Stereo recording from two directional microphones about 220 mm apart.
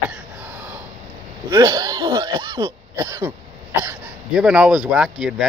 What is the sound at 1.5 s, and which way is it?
Speech, 15° right (ahead or behind).